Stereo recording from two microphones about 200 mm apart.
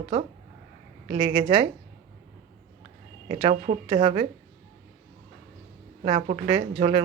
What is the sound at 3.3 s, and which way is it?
A woman's voice, 30° right (ahead or behind).